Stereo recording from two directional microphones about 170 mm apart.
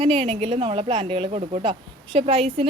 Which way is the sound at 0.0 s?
35° right (ahead or behind).